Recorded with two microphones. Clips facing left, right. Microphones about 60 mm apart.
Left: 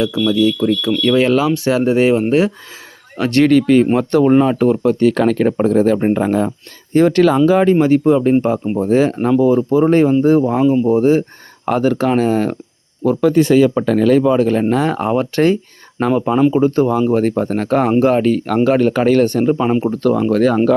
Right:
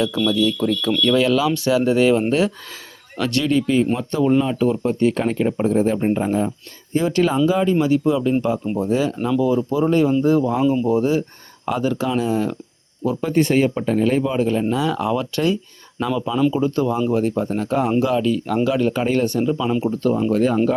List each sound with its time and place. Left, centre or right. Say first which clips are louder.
0.3 s speech: left 7 dB; left
1.1 s speech: left 5 dB; left
3.4 s speech: left 8 dB; left
6.9 s speech: left 7 dB; left
7.8 s speech: left 6 dB; left
11.6 s speech: left 6 dB; left
13.2 s speech: left 6 dB; left
17.1 s speech: left 5 dB; left
19.2 s speech: left 6 dB; left
19.9 s speech: left 4 dB; left